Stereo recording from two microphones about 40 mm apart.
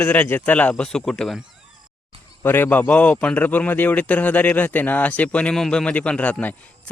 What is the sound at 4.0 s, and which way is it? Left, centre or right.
Speech, left.